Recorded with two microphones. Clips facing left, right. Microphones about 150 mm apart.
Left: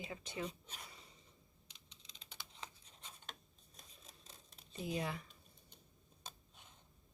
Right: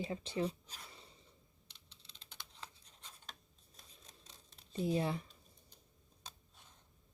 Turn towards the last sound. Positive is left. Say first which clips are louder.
# right 6 dB
turn(degrees=-30)  # may be behind; listen again after turning